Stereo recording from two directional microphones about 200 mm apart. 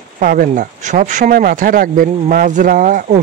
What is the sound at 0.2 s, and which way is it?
Speech, 45° right (ahead or behind).